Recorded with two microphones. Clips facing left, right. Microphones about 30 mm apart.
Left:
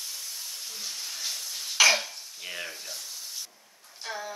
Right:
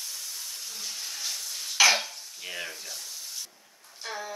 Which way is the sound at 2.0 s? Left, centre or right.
Centre.